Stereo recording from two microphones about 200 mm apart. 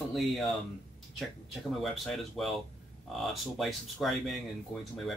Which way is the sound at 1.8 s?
Centre (ahead or behind).